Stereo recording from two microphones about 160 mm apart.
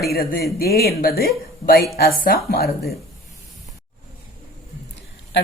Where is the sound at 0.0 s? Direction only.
70° left (ahead or behind).